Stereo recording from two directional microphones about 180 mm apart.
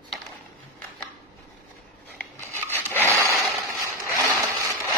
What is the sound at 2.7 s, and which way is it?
Wood, 15° left (ahead or behind).